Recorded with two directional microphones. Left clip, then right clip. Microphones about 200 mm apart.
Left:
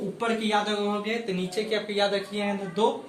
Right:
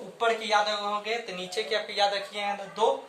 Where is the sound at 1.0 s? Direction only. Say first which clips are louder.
Left 2 dB; 30° right (ahead or behind).